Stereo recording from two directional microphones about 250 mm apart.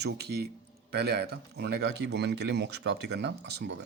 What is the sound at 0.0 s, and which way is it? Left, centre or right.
Speech, right.